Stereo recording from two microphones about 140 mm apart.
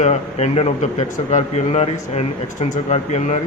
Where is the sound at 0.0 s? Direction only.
50° left (ahead or behind).